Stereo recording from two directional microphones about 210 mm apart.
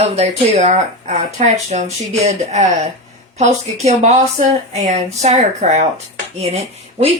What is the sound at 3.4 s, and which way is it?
Speech, 30° right (ahead or behind).